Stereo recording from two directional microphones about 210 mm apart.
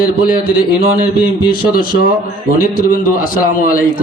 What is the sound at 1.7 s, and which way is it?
A man's voice, 45° left (ahead or behind).